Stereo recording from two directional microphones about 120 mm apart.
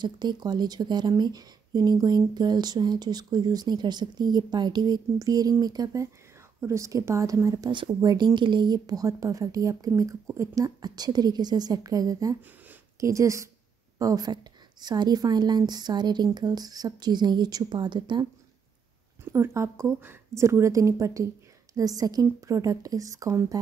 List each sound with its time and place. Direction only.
0.0 s a woman's voice: 40° right (ahead or behind)
7.7 s speech: 40° right (ahead or behind)
12.4 s a sound: 15° right (ahead or behind)
13.1 s a woman's voice: 25° right (ahead or behind); by 18.2 s 40° right (ahead or behind)
19.3 s a woman's voice: 20° right (ahead or behind)